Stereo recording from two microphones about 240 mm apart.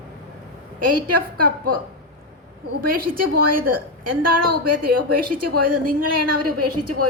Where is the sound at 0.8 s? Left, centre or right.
Right.